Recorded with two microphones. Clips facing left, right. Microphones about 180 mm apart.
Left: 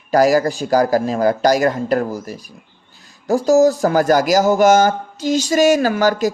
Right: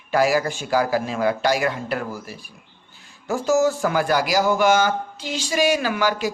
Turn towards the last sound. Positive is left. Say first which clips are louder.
# left 6 dB
turn(degrees=40)  # may be behind; listen again after turning